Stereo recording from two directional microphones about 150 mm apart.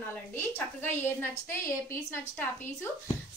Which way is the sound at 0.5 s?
15° left (ahead or behind).